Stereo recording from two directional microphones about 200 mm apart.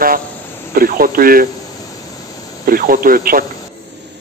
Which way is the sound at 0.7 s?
45° right (ahead or behind).